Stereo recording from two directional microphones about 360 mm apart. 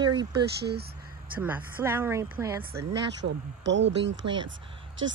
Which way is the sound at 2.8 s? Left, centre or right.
Right.